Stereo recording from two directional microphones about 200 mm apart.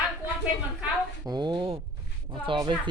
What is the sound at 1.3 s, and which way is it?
Speech, 20° right (ahead or behind).